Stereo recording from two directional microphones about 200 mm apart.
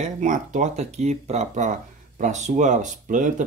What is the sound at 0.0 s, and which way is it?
Speech, 40° right (ahead or behind).